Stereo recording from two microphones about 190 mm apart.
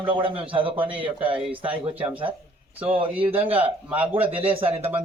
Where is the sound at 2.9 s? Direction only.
25° right (ahead or behind).